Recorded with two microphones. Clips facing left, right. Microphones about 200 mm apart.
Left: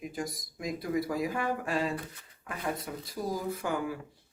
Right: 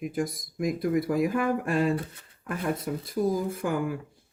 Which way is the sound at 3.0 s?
50° right (ahead or behind).